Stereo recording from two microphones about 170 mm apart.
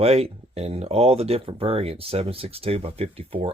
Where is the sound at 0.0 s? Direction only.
35° right (ahead or behind).